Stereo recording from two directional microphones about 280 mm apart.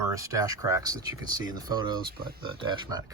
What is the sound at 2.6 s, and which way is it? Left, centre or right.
Speech, centre.